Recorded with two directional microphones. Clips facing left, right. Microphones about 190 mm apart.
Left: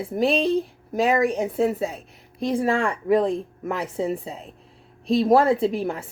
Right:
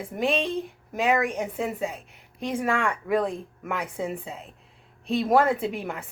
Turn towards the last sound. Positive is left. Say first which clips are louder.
# left 6 dB
turn(degrees=35)  # may be behind; listen again after turning